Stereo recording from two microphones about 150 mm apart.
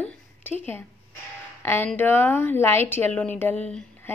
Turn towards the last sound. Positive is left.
turn(degrees=10)  # may be behind; listen again after turning